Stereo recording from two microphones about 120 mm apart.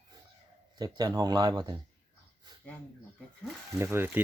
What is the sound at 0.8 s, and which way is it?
Speech, 35° right (ahead or behind).